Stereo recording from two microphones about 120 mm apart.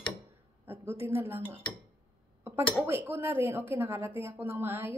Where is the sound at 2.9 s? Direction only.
15° right (ahead or behind).